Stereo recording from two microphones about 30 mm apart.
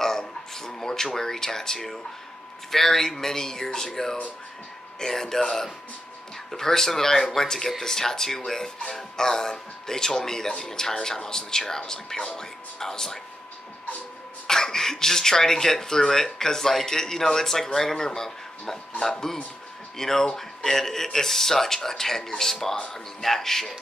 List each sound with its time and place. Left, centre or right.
0.6 s speech: centre
14.5 s speech: centre